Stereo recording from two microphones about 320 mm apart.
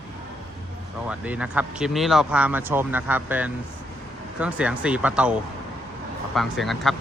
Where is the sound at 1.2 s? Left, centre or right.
Centre.